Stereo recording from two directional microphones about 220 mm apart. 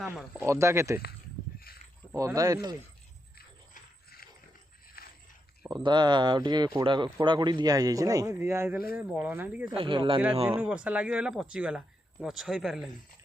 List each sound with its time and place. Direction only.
0.0 s speech: 5° right (ahead or behind)
1.5 s a sound: 45° left (ahead or behind)
2.1 s speech: 15° right (ahead or behind)
5.0 s a sound: 40° left (ahead or behind)
5.7 s speech: 20° right (ahead or behind)
9.6 s speech: 25° right (ahead or behind)
10.6 s speech: 5° right (ahead or behind)